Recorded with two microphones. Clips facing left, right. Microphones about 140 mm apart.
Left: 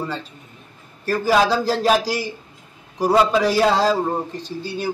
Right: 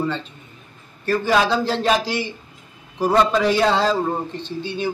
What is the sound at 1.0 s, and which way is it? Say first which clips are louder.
Speech: left 1 dB; 10° left (ahead or behind).